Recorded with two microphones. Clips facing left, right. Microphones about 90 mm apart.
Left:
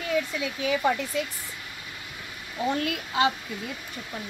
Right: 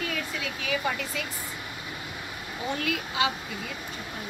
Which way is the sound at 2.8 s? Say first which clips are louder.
Left 1 dB; 40° left (ahead or behind).